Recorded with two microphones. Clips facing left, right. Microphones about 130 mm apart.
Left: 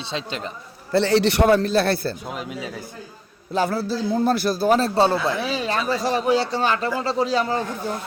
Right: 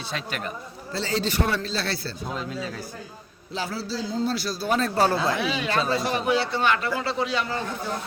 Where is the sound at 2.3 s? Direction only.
15° left (ahead or behind).